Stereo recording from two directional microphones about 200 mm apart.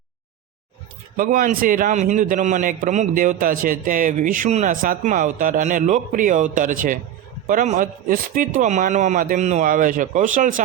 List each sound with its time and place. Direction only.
1.1 s a man's voice: 40° right (ahead or behind)